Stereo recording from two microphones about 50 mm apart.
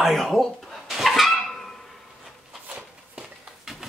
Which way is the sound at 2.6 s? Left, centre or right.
Right.